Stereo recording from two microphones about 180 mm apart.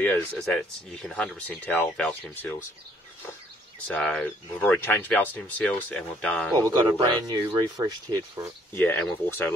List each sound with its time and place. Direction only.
0.0 s speech: 5° left (ahead or behind)
3.8 s speech: 5° left (ahead or behind)
6.7 s speech: 20° right (ahead or behind)
8.7 s speech: 10° left (ahead or behind)